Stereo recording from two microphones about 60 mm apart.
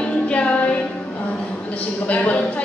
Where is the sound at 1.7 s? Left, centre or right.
Left.